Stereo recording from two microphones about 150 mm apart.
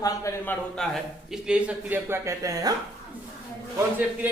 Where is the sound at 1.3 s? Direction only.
5° right (ahead or behind); by 2.8 s 25° right (ahead or behind).